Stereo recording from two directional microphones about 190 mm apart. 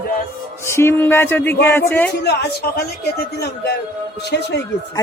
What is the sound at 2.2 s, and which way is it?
Speech, 60° left (ahead or behind).